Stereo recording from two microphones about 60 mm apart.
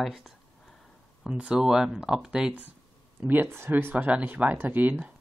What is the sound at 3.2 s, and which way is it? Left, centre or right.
Speech, right.